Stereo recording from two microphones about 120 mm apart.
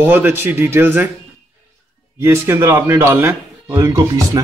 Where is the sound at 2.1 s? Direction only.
20° right (ahead or behind).